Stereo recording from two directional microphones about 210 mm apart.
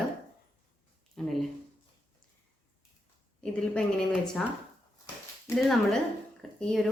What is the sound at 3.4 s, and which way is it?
Speech, centre (ahead or behind).